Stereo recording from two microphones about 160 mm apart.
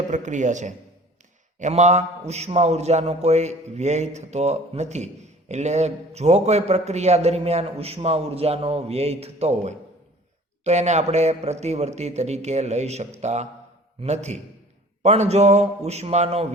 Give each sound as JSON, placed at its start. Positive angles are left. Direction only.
{"t": 0.1, "sound": "a man's voice", "side_deg": -50}